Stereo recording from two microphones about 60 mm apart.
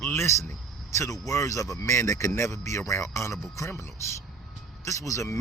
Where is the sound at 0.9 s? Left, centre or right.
Left.